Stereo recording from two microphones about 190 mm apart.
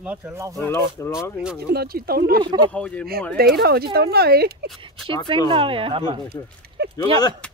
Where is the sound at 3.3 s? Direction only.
55° right (ahead or behind).